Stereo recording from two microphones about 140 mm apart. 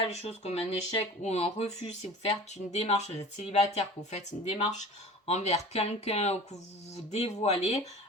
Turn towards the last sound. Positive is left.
turn(degrees=50)  # may be behind; listen again after turning